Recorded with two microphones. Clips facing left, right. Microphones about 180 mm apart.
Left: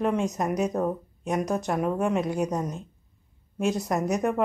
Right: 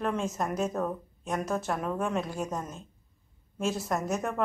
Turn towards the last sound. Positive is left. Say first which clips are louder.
# left 5 dB
turn(degrees=15)  # may be behind; listen again after turning